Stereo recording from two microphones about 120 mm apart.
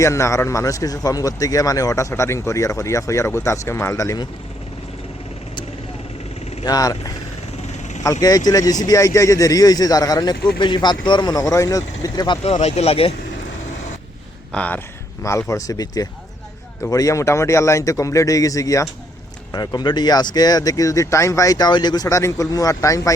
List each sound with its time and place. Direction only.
0.0 s speech: 25° left (ahead or behind)
6.7 s speech: 30° left (ahead or behind)
7.7 s vehicle: 80° left
8.0 s speech: 30° left (ahead or behind)
12.4 s speech: 60° left (ahead or behind)
14.5 s speech: 10° left (ahead or behind)
15.2 s speech: 25° left (ahead or behind)